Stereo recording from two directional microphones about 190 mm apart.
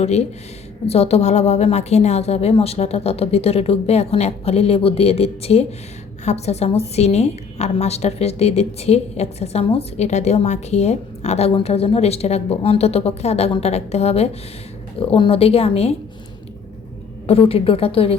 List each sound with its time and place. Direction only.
0.0 s a woman's voice: 35° left (ahead or behind)
17.2 s a woman's voice: 30° left (ahead or behind)